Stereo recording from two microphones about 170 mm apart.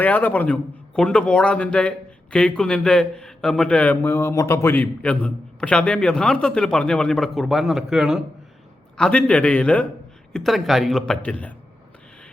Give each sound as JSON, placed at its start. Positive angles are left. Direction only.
{"t": 0.0, "sound": "a man's voice", "side_deg": 10}